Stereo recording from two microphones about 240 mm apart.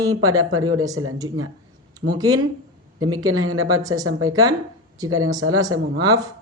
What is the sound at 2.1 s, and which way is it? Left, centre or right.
Speech, centre.